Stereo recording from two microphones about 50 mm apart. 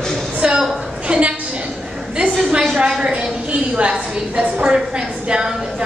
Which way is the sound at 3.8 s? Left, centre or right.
Right.